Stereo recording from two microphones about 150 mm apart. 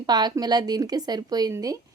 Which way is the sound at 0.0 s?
30° right (ahead or behind).